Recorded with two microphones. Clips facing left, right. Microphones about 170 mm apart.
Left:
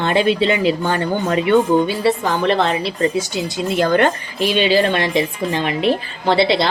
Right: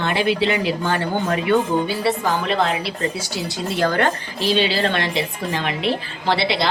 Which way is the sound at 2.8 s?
20° left (ahead or behind).